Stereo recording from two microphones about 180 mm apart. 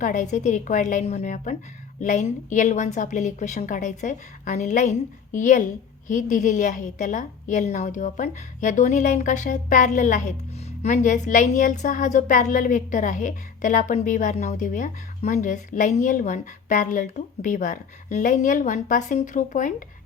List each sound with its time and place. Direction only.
0.0 s a woman's voice: 45° left (ahead or behind)